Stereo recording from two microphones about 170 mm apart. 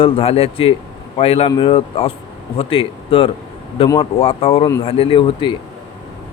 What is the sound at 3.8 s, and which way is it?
Speech, 20° left (ahead or behind).